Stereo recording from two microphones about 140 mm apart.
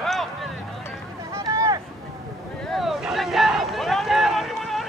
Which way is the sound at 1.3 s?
20° right (ahead or behind).